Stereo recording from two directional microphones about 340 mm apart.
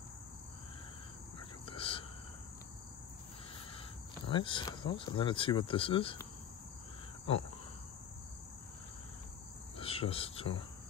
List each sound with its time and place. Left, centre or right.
1.7 s a sound: centre
4.3 s speech: centre
9.8 s speech: centre